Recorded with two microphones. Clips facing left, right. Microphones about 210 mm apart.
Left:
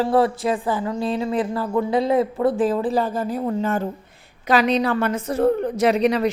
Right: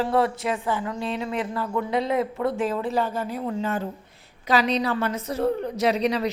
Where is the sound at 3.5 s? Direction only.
50° left (ahead or behind).